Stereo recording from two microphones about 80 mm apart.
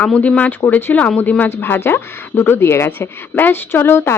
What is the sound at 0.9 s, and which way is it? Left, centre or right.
Speech, centre.